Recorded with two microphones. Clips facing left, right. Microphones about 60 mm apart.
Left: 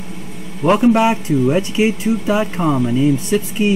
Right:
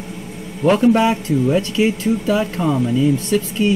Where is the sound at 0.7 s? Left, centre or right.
Centre.